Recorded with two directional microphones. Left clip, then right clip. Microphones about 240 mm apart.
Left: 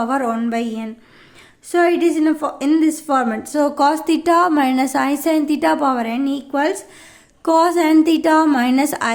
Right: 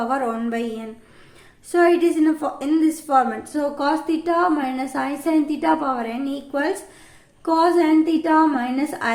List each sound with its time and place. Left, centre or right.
0.0 s a woman's voice: left